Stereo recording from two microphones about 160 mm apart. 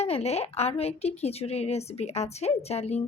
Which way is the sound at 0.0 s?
40° left (ahead or behind).